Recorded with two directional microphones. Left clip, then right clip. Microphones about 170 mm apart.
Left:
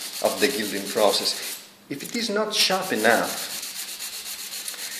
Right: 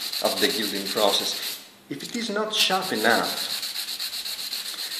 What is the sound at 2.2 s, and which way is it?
Rub, 25° left (ahead or behind).